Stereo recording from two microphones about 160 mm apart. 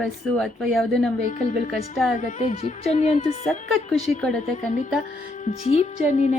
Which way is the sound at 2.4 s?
40° left (ahead or behind).